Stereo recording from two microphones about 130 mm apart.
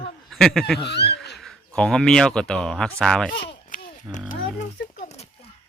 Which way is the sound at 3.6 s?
85° left.